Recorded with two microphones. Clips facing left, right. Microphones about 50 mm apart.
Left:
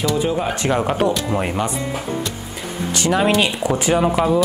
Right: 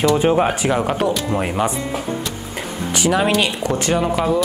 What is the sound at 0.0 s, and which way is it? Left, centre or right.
Speech, right.